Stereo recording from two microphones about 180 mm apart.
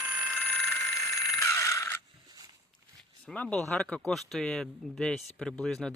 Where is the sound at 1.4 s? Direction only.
15° left (ahead or behind).